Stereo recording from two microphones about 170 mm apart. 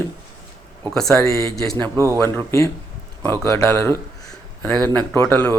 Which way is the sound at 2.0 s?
15° right (ahead or behind).